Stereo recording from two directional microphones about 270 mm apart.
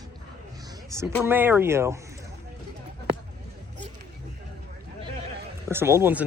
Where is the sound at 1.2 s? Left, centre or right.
Centre.